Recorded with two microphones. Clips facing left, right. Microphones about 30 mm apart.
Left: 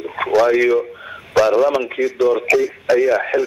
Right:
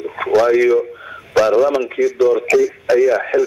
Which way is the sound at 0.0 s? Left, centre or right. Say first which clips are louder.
Even; centre.